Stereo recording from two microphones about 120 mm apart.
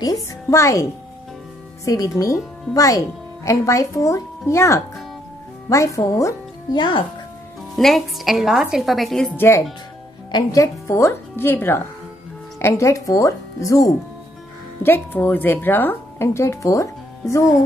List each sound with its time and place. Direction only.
0.0 s a woman's voice: 25° left (ahead or behind)
1.9 s a woman's voice: 25° left (ahead or behind)
7.7 s a woman's voice: centre (ahead or behind)
9.3 s a woman's voice: 20° left (ahead or behind)
14.8 s a woman's voice: 15° left (ahead or behind)